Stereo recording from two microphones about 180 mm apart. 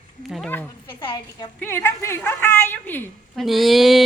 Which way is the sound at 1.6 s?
15° left (ahead or behind).